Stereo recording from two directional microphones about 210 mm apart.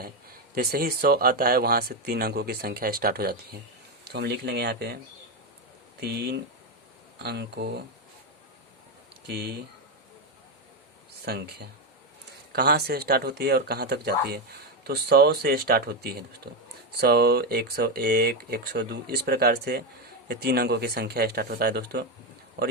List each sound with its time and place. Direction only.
0.5 s speech: 45° right (ahead or behind)
6.0 s speech: 50° right (ahead or behind)
9.2 s speech: 50° right (ahead or behind)
11.3 s speech: 50° right (ahead or behind)